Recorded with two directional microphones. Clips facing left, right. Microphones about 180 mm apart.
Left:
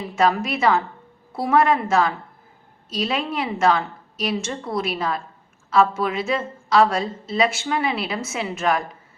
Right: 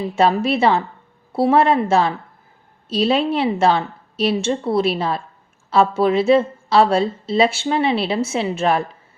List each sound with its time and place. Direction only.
0.2 s a woman's voice: 30° right (ahead or behind)